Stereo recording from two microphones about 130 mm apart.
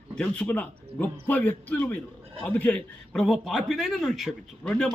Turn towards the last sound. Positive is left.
turn(degrees=5)  # may be behind; listen again after turning